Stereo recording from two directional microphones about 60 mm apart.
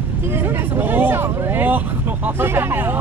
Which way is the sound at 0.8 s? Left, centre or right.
Right.